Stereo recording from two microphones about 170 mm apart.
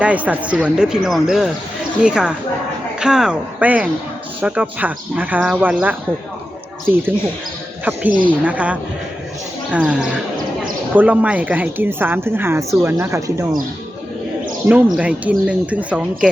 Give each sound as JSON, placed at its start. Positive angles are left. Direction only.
{"t": 0.0, "sound": "speech", "side_deg": -10}
{"t": 14.7, "sound": "speech", "side_deg": -5}